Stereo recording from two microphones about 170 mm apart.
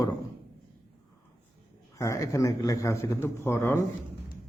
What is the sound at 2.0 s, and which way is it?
A man's voice, 20° left (ahead or behind).